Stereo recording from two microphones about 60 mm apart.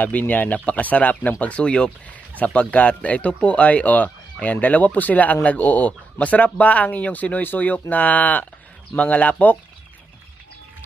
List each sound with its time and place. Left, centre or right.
0.0 s speech: left